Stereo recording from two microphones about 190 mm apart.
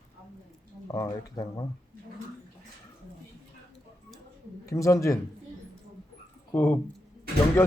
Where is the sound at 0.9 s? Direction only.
15° left (ahead or behind).